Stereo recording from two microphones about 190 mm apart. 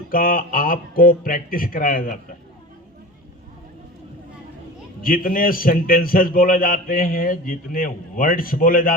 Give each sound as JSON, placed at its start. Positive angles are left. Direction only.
{"t": 0.1, "sound": "a man's voice", "side_deg": 50}
{"t": 5.0, "sound": "a man's voice", "side_deg": 45}